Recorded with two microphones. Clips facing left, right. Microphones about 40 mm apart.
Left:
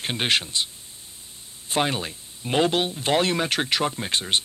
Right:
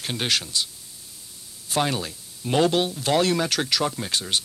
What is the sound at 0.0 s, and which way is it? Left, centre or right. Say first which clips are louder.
Speech: left 2 dB; left.